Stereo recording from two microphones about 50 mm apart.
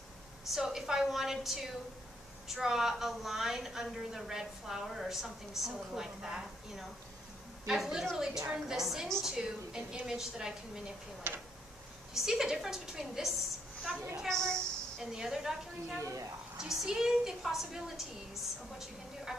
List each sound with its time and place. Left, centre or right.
0.5 s a woman's voice: centre
12.1 s a woman's voice: centre
14.2 s a woman's voice: centre
15.0 s a woman's voice: centre
16.0 s a woman's voice: right
16.5 s a woman's voice: centre